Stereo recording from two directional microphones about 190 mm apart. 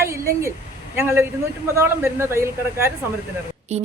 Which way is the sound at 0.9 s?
10° right (ahead or behind).